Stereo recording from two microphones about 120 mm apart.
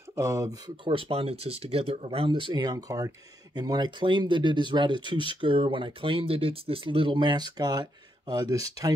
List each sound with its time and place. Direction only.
0.1 s speech: 25° right (ahead or behind)
0.8 s speech: 45° right (ahead or behind); by 8.9 s 30° right (ahead or behind)